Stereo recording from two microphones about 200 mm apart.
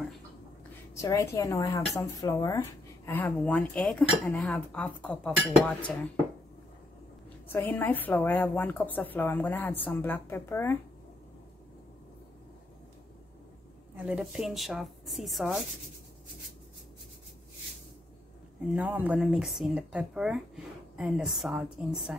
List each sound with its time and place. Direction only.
0.9 s a woman's voice: 15° left (ahead or behind)
7.4 s a woman's voice: 10° left (ahead or behind)
13.9 s speech: 5° right (ahead or behind)
18.7 s speech: 5° right (ahead or behind)